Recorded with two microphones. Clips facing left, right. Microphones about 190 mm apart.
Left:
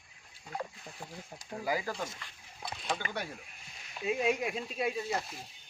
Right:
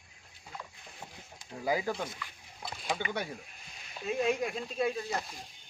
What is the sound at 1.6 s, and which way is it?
Speech, 25° right (ahead or behind).